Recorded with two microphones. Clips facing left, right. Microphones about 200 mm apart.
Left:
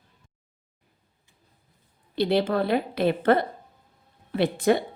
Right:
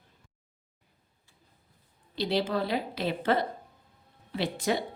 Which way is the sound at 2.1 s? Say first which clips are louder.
Left 6 dB; 55° left (ahead or behind).